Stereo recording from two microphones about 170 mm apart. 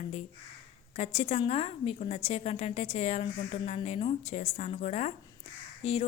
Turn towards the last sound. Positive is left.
turn(degrees=35)  # may be behind; listen again after turning